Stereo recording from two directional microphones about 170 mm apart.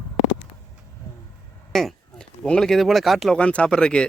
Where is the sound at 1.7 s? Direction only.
Centre (ahead or behind).